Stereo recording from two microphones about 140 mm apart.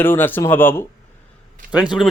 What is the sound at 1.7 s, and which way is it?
Speech, 5° right (ahead or behind).